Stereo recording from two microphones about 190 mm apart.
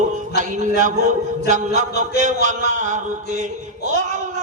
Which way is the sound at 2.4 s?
40° right (ahead or behind).